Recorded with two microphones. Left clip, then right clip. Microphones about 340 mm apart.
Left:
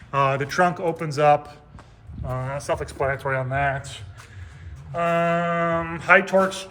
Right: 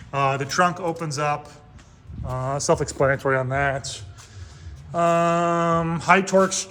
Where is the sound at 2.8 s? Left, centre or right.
Right.